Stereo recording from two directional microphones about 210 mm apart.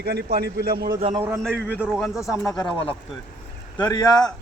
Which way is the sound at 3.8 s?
20° left (ahead or behind).